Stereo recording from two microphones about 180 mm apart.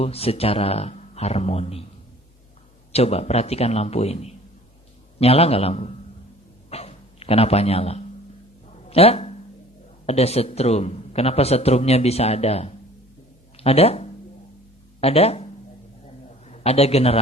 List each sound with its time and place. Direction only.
0.0 s a man's voice: 35° left (ahead or behind)
2.9 s a man's voice: 35° left (ahead or behind)
6.7 s a sound: 35° left (ahead or behind)
8.9 s a man's voice: 35° left (ahead or behind)
16.5 s a man's voice: 35° left (ahead or behind)